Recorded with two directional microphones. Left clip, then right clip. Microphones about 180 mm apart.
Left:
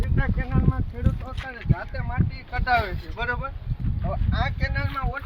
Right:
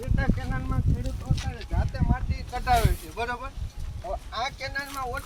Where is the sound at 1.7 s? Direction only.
Centre (ahead or behind).